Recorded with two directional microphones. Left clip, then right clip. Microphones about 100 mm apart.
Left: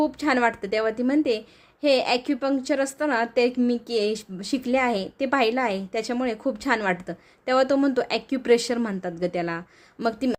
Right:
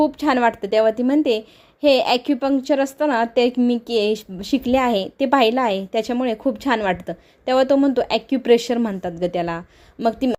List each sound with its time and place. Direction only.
0.0 s speech: 15° right (ahead or behind)
4.7 s speech: 30° right (ahead or behind); by 10.3 s 15° right (ahead or behind)